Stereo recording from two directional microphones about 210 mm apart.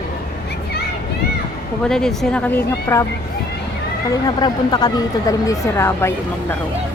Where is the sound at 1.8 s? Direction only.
5° left (ahead or behind).